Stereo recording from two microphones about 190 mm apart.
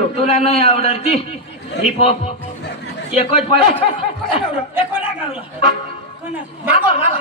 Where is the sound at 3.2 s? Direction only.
30° left (ahead or behind).